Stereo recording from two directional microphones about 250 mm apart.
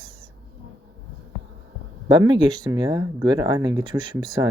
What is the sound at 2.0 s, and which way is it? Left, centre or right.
Speech, centre.